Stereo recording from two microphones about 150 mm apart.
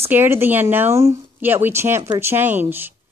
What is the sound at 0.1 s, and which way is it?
Speech, 15° right (ahead or behind).